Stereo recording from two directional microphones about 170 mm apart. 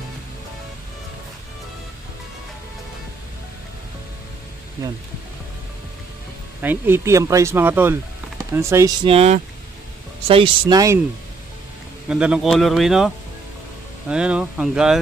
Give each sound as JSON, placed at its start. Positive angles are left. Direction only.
{"t": 6.6, "sound": "speech", "side_deg": -10}
{"t": 9.0, "sound": "speech", "side_deg": -35}
{"t": 12.1, "sound": "speech", "side_deg": -5}